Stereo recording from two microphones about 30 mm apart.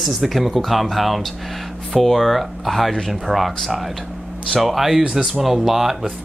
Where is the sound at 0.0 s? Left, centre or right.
Centre.